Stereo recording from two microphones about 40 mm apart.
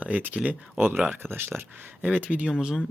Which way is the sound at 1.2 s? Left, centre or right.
Right.